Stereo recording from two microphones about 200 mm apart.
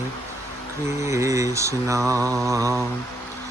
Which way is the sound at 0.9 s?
15° right (ahead or behind).